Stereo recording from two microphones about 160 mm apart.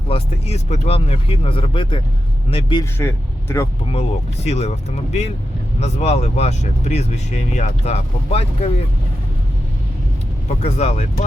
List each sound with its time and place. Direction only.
0.1 s speech: 40° left (ahead or behind)
3.0 s speech: 15° left (ahead or behind)
4.4 s speech: 40° left (ahead or behind)
10.6 s speech: 45° left (ahead or behind)